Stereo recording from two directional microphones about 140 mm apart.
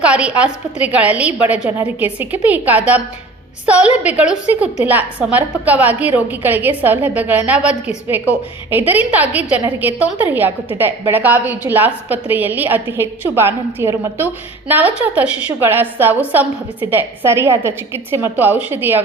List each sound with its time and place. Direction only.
0.0 s a woman's voice: 10° right (ahead or behind)